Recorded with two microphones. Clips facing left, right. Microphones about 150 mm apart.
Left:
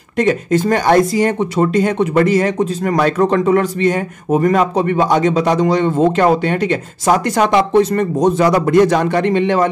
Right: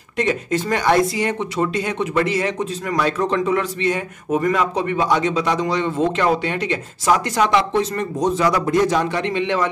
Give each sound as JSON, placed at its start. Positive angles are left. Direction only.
{"t": 0.2, "sound": "speech", "side_deg": 45}
{"t": 8.6, "sound": "speech", "side_deg": 70}